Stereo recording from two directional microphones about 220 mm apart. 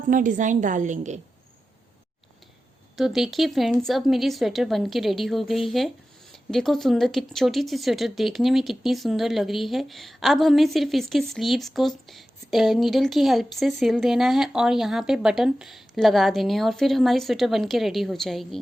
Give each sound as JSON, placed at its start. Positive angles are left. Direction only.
{"t": 0.1, "sound": "a woman's voice", "side_deg": -35}
{"t": 2.9, "sound": "speech", "side_deg": 0}